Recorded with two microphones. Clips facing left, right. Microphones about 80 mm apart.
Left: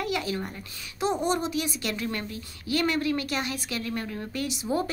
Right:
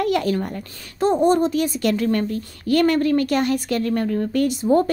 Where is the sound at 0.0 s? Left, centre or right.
Right.